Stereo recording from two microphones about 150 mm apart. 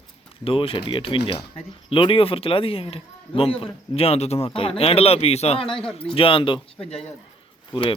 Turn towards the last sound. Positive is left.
turn(degrees=35)  # may be behind; listen again after turning